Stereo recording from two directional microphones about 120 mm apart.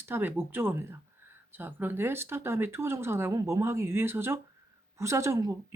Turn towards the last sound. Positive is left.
turn(degrees=-25)  # may be behind; listen again after turning